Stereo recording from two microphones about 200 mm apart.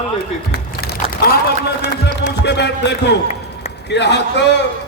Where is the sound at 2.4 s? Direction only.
60° left (ahead or behind).